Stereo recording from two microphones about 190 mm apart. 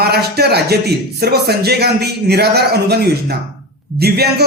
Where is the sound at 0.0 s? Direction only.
55° right (ahead or behind).